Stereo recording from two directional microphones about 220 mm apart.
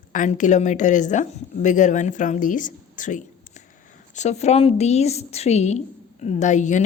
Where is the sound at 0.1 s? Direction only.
35° left (ahead or behind).